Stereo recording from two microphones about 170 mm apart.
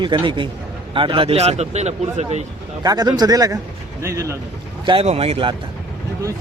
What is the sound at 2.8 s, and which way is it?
Speech, 20° right (ahead or behind).